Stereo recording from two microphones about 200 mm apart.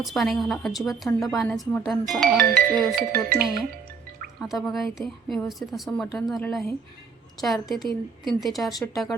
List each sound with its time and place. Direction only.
0.0 s a woman's voice: centre (ahead or behind)
3.1 s speech: 45° right (ahead or behind)
4.4 s a woman's voice: centre (ahead or behind)